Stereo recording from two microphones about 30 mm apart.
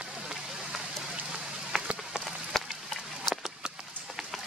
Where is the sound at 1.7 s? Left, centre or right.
Centre.